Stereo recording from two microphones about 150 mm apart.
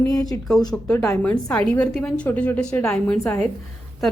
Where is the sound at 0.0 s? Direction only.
25° left (ahead or behind).